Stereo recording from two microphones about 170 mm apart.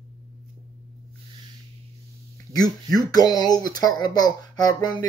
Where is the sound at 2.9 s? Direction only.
25° left (ahead or behind).